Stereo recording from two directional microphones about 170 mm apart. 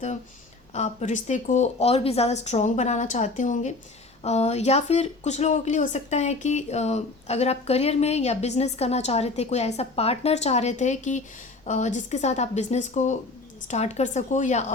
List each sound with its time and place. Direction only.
0.7 s speech: 40° left (ahead or behind)